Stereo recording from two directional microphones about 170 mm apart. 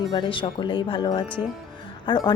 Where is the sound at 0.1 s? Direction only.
25° left (ahead or behind).